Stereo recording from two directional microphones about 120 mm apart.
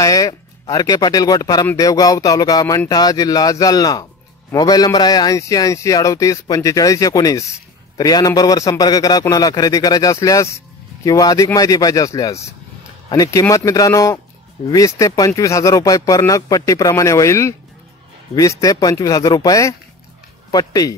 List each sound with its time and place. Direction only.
0.0 s speech: 30° left (ahead or behind)